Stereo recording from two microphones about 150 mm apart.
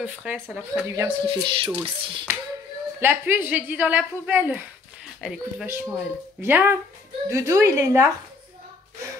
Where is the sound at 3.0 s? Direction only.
15° right (ahead or behind).